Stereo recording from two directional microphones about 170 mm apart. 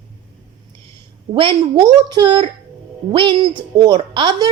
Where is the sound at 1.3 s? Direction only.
25° right (ahead or behind).